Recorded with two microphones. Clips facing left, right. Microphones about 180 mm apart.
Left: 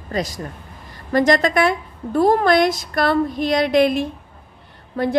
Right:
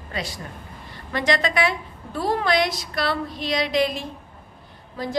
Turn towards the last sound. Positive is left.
turn(degrees=60)  # may be behind; listen again after turning